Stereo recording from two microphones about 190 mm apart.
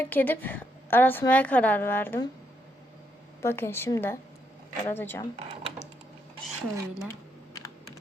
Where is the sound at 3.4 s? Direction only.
15° left (ahead or behind).